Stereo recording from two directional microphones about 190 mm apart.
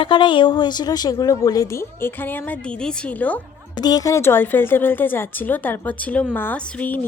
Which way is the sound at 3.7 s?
20° left (ahead or behind).